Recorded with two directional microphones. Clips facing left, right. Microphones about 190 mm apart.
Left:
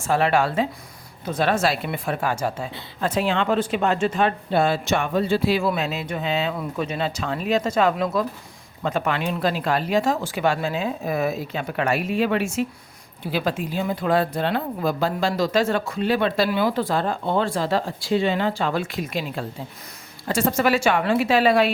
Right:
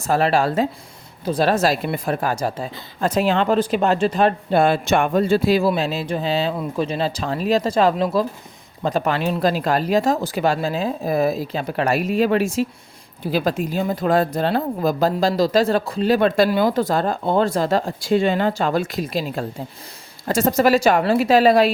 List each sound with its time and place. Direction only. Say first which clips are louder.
0.0 s speech: right 2 dB; 40° right (ahead or behind)